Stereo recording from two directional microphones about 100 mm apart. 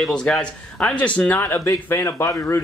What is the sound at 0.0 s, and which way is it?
A man's voice, 5° left (ahead or behind).